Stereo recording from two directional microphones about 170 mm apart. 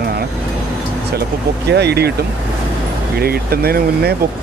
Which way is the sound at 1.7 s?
75° right (ahead or behind).